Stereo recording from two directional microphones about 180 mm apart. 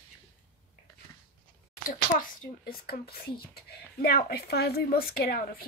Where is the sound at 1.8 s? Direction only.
50° left (ahead or behind).